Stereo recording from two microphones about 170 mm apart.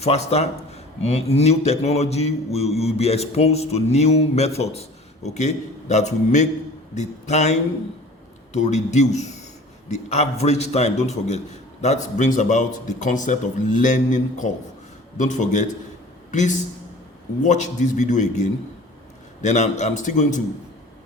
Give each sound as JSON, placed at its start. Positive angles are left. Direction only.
{"t": 0.0, "sound": "a man's voice", "side_deg": 40}